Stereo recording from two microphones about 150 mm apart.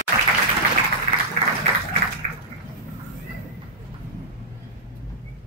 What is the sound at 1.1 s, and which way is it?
Music, 45° right (ahead or behind).